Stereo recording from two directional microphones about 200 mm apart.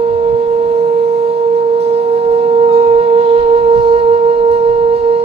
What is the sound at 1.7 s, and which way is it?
Music, 30° right (ahead or behind).